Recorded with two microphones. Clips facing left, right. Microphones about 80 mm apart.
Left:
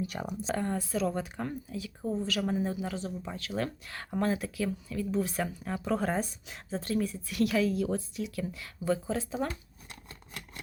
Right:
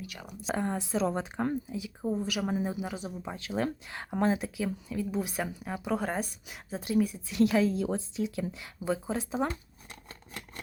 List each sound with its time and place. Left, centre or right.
0.0 s speech: left
0.4 s speech: centre